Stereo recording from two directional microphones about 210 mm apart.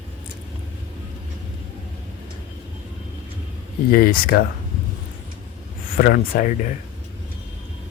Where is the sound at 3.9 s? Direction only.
45° left (ahead or behind).